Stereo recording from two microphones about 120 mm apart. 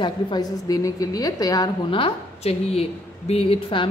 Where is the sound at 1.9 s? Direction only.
55° left (ahead or behind).